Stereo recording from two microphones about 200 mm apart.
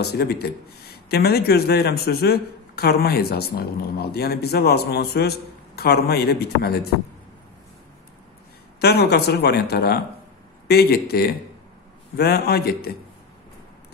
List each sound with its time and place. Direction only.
0.0 s speech: 55° left (ahead or behind)
8.8 s speech: 55° left (ahead or behind)